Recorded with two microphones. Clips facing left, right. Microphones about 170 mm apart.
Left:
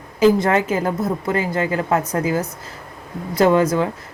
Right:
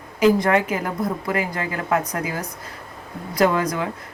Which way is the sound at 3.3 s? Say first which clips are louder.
Left 4 dB; 25° left (ahead or behind).